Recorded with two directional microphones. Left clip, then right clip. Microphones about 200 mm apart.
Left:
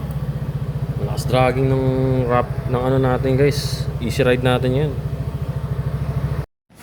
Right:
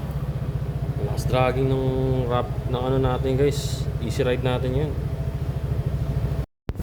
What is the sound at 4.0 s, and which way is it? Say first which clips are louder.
Speech: left 6 dB; 20° left (ahead or behind).